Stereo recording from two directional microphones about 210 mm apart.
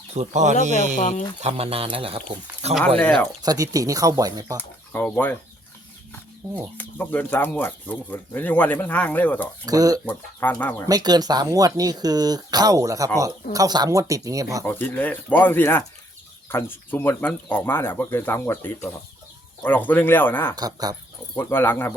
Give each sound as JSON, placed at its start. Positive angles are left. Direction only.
{"t": 0.2, "sound": "speech", "side_deg": -35}
{"t": 0.9, "sound": "speech", "side_deg": 40}
{"t": 1.4, "sound": "speech", "side_deg": -30}
{"t": 3.0, "sound": "speech", "side_deg": 5}
{"t": 3.4, "sound": "speech", "side_deg": -15}
{"t": 4.5, "sound": "speech", "side_deg": 10}
{"t": 6.6, "sound": "speech", "side_deg": 10}
{"t": 9.6, "sound": "speech", "side_deg": -15}
{"t": 10.1, "sound": "speech", "side_deg": 10}
{"t": 10.8, "sound": "speech", "side_deg": -20}
{"t": 14.6, "sound": "speech", "side_deg": 10}
{"t": 20.6, "sound": "speech", "side_deg": -20}
{"t": 21.3, "sound": "speech", "side_deg": 10}